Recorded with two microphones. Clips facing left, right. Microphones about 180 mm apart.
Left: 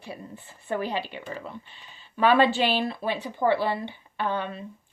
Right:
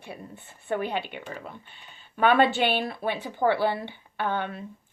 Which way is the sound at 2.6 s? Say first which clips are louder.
Even; 60° right (ahead or behind).